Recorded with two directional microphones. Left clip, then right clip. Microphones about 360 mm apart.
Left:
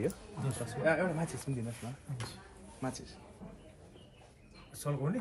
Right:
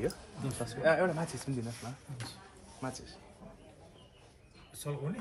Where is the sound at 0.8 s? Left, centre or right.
Centre.